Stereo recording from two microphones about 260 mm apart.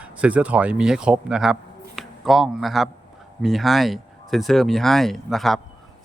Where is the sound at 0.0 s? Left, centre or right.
Centre.